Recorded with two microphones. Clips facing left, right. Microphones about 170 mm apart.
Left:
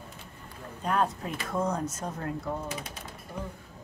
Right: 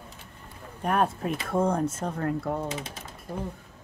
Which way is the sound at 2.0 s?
60° right (ahead or behind).